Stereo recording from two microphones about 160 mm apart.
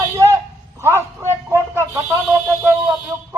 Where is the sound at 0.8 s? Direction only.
15° right (ahead or behind).